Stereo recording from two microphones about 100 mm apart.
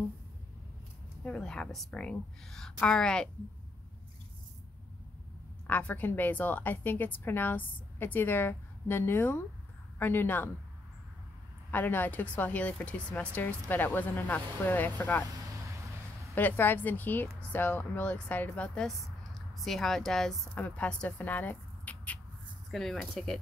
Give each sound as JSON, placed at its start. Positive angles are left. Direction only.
{"t": 1.2, "sound": "speech", "side_deg": 10}
{"t": 5.7, "sound": "a woman's voice", "side_deg": 15}
{"t": 11.7, "sound": "speech", "side_deg": 20}
{"t": 16.3, "sound": "speech", "side_deg": 20}
{"t": 18.9, "sound": "speech", "side_deg": 0}
{"t": 22.7, "sound": "speech", "side_deg": 5}